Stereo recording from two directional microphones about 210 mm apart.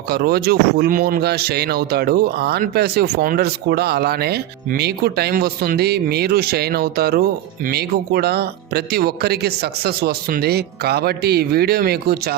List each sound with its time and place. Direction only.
0.1 s speech: 50° right (ahead or behind)